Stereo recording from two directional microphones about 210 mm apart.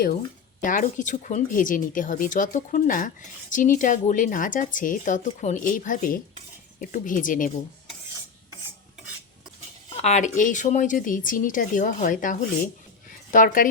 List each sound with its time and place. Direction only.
0.6 s speech: 40° left (ahead or behind)
10.0 s speech: 35° left (ahead or behind)
13.1 s a sound: 40° left (ahead or behind)